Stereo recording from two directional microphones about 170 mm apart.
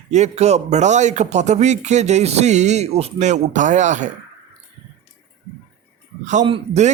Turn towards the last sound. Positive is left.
turn(degrees=-35)  # may be behind; listen again after turning